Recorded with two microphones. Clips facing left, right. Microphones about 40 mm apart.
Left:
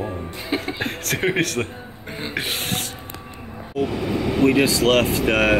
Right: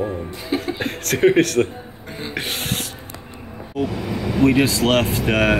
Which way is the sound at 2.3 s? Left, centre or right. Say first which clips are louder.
Even; centre.